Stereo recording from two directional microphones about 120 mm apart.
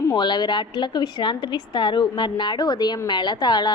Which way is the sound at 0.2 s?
40° left (ahead or behind).